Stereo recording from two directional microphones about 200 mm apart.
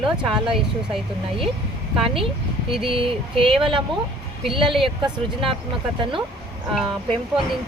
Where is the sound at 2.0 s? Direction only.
25° right (ahead or behind).